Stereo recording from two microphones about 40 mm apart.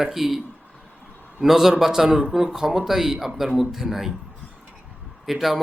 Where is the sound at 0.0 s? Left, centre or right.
Centre.